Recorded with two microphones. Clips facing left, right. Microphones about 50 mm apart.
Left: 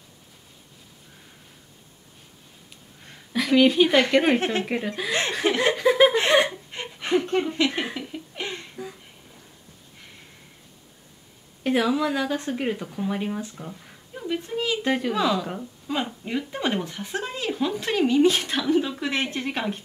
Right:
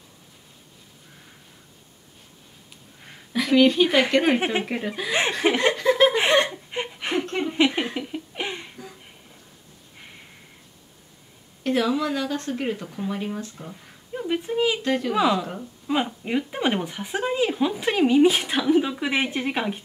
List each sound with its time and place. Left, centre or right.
3.3 s speech: centre
4.4 s speech: centre
4.6 s speech: centre
5.4 s speech: centre
5.7 s a sound: centre
6.7 s a sound: centre
7.5 s speech: centre
7.9 s a sound: centre
11.6 s speech: centre
14.1 s speech: centre
14.8 s speech: centre
15.1 s speech: centre